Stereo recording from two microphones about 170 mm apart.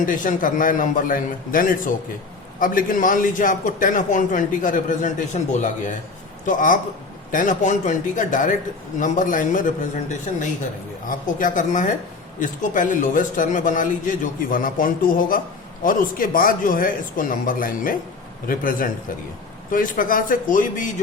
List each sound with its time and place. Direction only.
0.0 s a man's voice: 50° left (ahead or behind)